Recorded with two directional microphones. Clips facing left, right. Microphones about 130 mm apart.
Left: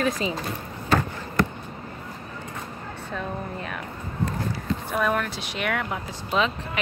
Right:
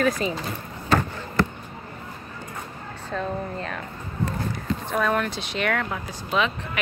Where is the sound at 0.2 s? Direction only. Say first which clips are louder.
Right 1 dB; 45° right (ahead or behind).